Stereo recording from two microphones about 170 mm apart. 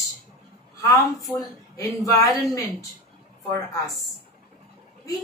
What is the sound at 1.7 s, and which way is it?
Speech, 20° left (ahead or behind).